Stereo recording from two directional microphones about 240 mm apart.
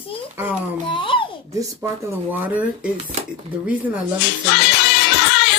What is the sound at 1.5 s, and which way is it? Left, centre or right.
Speech, centre.